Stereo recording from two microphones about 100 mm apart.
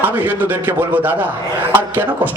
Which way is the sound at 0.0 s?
15° right (ahead or behind).